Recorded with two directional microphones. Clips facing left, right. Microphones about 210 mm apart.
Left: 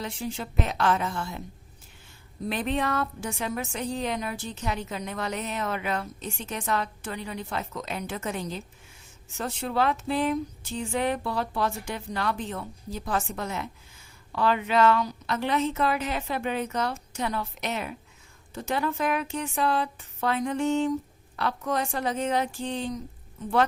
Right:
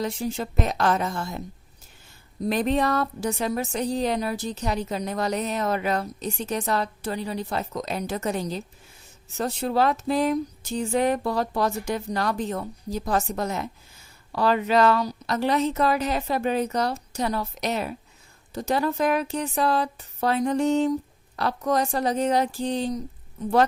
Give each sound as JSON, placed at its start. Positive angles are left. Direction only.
{"t": 0.0, "sound": "a woman's voice", "side_deg": -40}
{"t": 2.4, "sound": "a woman's voice", "side_deg": -40}